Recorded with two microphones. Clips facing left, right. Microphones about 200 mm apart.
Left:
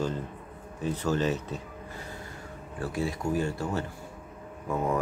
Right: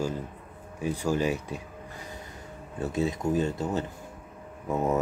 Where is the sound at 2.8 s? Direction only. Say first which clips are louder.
Right 3 dB; 20° right (ahead or behind).